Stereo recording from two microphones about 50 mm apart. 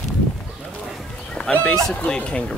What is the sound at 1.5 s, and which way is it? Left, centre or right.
Speech, left.